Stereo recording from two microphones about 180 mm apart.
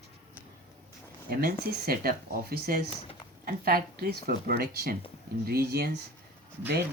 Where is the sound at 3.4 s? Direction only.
55° right (ahead or behind).